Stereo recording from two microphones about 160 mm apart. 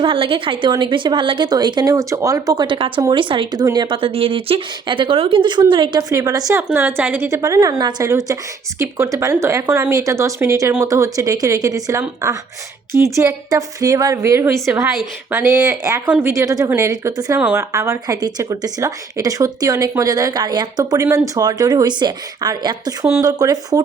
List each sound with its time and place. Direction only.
0.0 s speech: 35° right (ahead or behind)
6.7 s speech: 10° right (ahead or behind)